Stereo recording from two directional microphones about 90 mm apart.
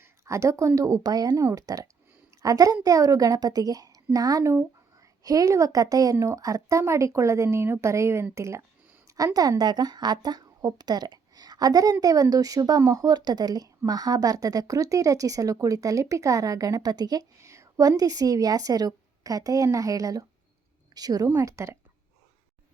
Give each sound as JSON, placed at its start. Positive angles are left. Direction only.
{"t": 0.0, "sound": "a sound", "side_deg": -35}
{"t": 0.8, "sound": "a woman's voice", "side_deg": -40}
{"t": 21.4, "sound": "a woman's voice", "side_deg": -35}